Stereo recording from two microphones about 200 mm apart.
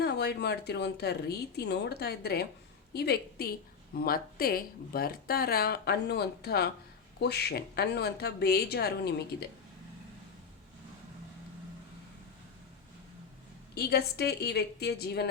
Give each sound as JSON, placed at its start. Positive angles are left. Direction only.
{"t": 0.0, "sound": "speech", "side_deg": 55}
{"t": 13.7, "sound": "speech", "side_deg": 55}